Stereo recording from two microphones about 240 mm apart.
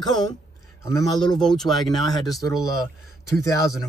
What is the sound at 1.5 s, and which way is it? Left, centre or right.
Speech, centre.